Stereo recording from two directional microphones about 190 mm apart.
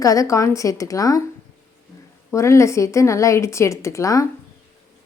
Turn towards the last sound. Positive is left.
turn(degrees=15)  # may be behind; listen again after turning